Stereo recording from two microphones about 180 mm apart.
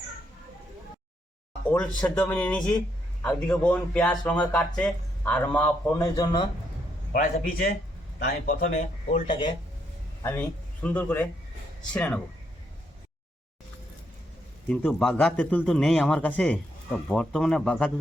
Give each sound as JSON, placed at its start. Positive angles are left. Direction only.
{"t": 2.0, "sound": "speech", "side_deg": 5}
{"t": 7.1, "sound": "speech", "side_deg": 50}
{"t": 9.2, "sound": "speech", "side_deg": 30}
{"t": 10.8, "sound": "speech", "side_deg": 10}
{"t": 14.7, "sound": "speech", "side_deg": 5}